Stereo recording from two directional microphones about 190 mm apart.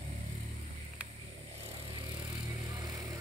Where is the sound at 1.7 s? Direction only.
25° right (ahead or behind).